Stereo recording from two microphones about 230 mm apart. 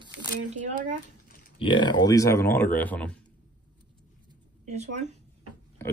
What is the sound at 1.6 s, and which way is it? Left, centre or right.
Speech, left.